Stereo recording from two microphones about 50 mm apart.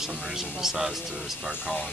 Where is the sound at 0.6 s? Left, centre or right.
Centre.